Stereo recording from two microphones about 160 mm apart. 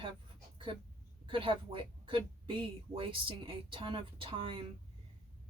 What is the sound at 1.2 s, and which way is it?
Speech, 35° right (ahead or behind).